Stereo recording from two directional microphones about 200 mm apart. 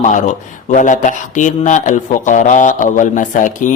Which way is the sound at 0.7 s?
40° left (ahead or behind).